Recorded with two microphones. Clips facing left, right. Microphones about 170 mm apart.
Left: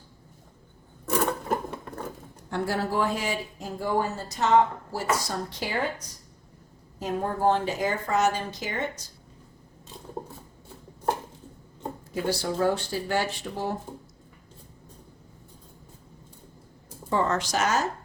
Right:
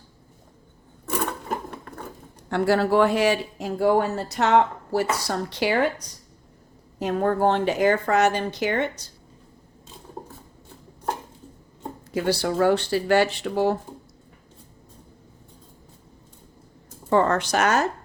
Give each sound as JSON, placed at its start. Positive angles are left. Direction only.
{"t": 2.5, "sound": "speech", "side_deg": -75}
{"t": 7.0, "sound": "speech", "side_deg": -70}
{"t": 12.1, "sound": "speech", "side_deg": -75}
{"t": 17.1, "sound": "speech", "side_deg": -60}